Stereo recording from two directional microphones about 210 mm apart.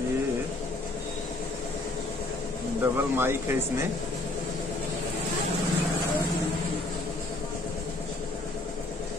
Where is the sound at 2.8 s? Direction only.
10° right (ahead or behind).